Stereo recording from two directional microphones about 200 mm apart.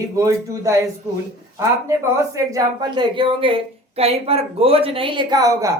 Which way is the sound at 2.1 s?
15° right (ahead or behind).